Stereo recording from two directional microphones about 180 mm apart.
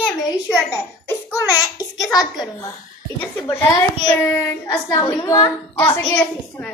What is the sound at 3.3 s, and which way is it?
A child's voice, 10° left (ahead or behind).